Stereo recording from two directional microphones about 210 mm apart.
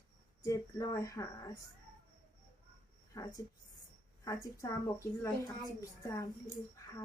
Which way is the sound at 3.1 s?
15° left (ahead or behind).